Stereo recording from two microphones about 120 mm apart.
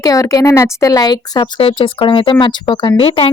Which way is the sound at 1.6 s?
45° left (ahead or behind).